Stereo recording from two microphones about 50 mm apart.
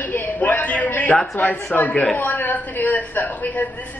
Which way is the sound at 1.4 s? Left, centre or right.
Left.